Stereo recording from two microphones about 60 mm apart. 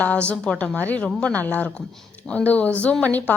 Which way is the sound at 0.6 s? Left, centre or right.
Left.